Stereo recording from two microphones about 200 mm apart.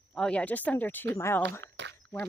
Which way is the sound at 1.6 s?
65° right (ahead or behind).